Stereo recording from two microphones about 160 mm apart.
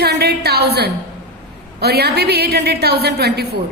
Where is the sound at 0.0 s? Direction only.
90° right.